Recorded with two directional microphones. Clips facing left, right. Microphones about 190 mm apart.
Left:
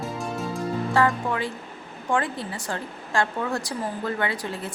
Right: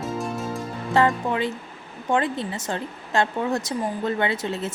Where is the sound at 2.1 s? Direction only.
20° right (ahead or behind).